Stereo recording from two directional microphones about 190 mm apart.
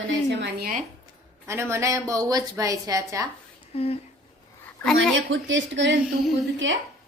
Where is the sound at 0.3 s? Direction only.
65° right (ahead or behind).